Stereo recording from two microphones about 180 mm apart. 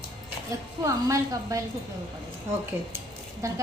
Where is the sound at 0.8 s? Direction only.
20° right (ahead or behind).